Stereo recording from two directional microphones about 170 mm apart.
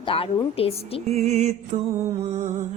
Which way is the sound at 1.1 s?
40° right (ahead or behind).